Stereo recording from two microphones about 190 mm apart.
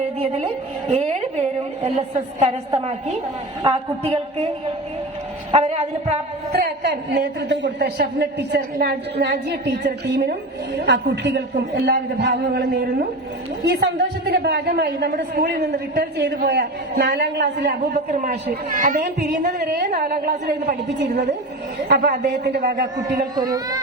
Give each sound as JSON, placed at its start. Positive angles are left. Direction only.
{"t": 0.9, "sound": "a woman's voice", "side_deg": -30}
{"t": 3.6, "sound": "a woman's voice", "side_deg": -30}
{"t": 5.5, "sound": "a woman's voice", "side_deg": -35}
{"t": 6.5, "sound": "a woman's voice", "side_deg": -55}
{"t": 14.3, "sound": "a woman's voice", "side_deg": -55}
{"t": 18.1, "sound": "a woman's voice", "side_deg": -45}
{"t": 19.0, "sound": "a woman's voice", "side_deg": -60}
{"t": 23.0, "sound": "speech", "side_deg": -20}